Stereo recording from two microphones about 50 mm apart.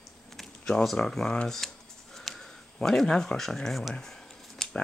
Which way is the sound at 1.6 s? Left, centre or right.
Centre.